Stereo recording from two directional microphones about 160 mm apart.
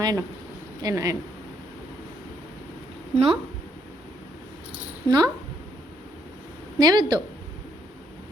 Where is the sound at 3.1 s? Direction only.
35° right (ahead or behind).